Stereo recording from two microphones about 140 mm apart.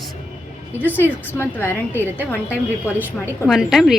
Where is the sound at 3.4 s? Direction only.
Centre (ahead or behind).